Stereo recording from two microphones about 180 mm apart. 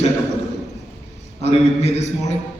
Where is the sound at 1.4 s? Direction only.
35° left (ahead or behind).